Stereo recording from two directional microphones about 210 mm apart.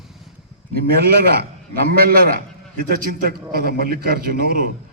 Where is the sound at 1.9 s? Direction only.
45° right (ahead or behind).